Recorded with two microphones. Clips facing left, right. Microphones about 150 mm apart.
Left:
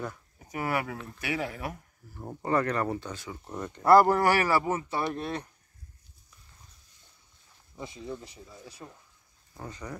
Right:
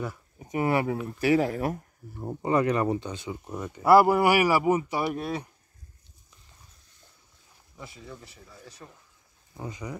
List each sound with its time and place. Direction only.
0.4 s speech: 20° right (ahead or behind)
1.2 s speech: 40° right (ahead or behind)
2.1 s speech: 15° right (ahead or behind)
3.5 s speech: 5° right (ahead or behind)
7.7 s speech: 20° left (ahead or behind)
9.5 s speech: 10° right (ahead or behind)